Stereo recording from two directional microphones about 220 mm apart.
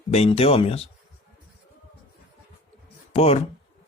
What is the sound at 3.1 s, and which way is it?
Speech, 30° left (ahead or behind).